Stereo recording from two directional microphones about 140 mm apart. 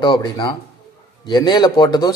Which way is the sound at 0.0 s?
30° left (ahead or behind).